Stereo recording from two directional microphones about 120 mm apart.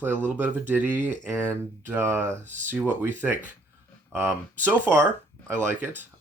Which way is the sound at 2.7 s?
15° right (ahead or behind).